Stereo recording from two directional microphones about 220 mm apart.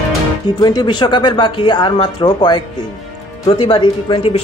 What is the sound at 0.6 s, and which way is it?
Speech, 20° left (ahead or behind).